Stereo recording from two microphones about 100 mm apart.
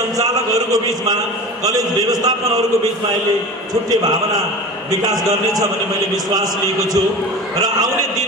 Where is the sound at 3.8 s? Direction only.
40° right (ahead or behind).